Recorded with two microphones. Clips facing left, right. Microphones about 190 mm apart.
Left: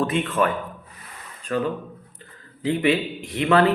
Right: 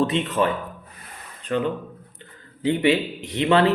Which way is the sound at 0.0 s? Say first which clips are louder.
Right 1 dB; 25° right (ahead or behind).